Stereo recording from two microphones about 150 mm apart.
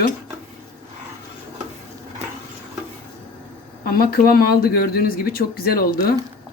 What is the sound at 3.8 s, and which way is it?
Speech, 90° left.